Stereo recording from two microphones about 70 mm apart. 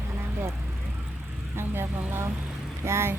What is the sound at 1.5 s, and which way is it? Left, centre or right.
Speech, right.